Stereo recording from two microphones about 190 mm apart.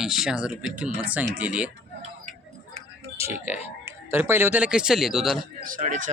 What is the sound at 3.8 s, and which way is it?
Speech, 10° right (ahead or behind).